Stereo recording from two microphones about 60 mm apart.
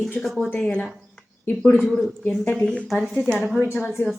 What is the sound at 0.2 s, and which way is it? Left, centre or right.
Speech, centre.